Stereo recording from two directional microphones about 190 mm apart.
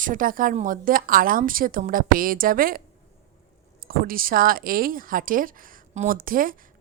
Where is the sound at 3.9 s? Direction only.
50° right (ahead or behind).